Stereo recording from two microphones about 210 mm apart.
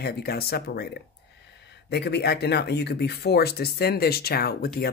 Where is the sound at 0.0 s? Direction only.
50° left (ahead or behind).